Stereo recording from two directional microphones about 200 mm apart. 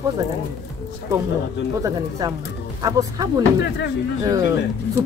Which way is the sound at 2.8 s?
15° right (ahead or behind).